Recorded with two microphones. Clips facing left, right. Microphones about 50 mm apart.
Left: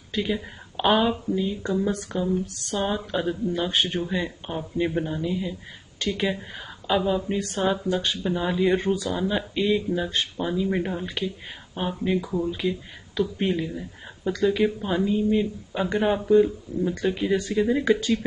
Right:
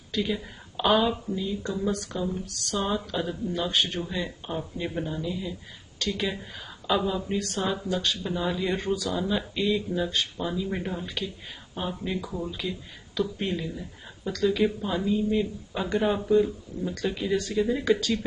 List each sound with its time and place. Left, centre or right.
0.1 s speech: left
9.2 s speech: centre